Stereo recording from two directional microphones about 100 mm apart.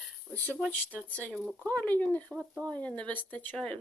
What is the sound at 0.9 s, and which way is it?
Speech, 15° left (ahead or behind).